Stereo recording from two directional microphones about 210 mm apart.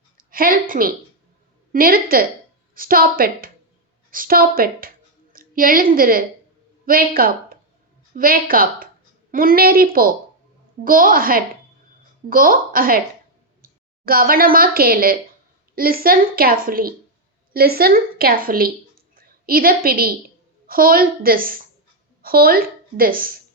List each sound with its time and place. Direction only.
0.2 s a woman's voice: 40° right (ahead or behind)